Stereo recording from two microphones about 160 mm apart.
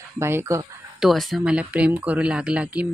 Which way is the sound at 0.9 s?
Centre (ahead or behind).